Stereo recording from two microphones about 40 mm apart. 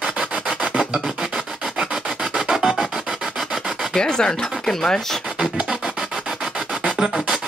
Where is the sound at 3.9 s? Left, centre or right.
Centre.